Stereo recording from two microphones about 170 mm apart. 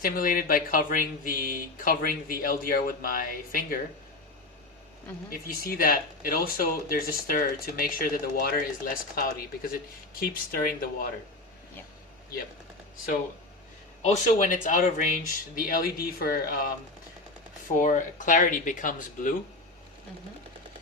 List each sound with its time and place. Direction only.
0.0 s speech: 55° left (ahead or behind)
5.5 s speech: 55° left (ahead or behind)
14.0 s speech: 45° left (ahead or behind)
17.7 s speech: 50° left (ahead or behind)